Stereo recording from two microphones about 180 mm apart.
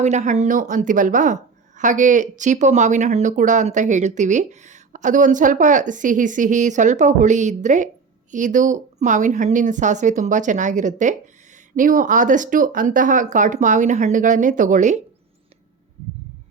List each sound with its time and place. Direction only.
0.0 s a woman's voice: 40° right (ahead or behind)